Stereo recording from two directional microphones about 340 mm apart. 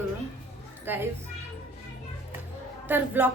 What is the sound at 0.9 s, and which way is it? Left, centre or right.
Speech, centre.